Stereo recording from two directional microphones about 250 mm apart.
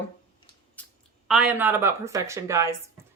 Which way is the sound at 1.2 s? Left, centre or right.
Centre.